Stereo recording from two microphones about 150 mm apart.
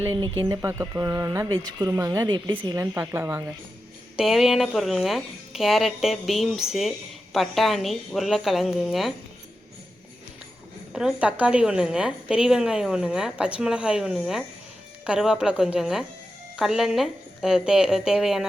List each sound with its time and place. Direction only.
0.0 s speech: 25° right (ahead or behind)
4.2 s a woman's voice: centre (ahead or behind)
10.9 s a woman's voice: 5° right (ahead or behind)